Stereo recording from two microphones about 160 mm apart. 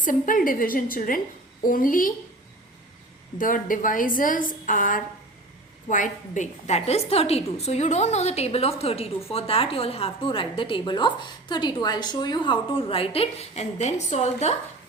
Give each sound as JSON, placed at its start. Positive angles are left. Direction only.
{"t": 0.0, "sound": "a woman's voice", "side_deg": 55}
{"t": 3.3, "sound": "a woman's voice", "side_deg": 55}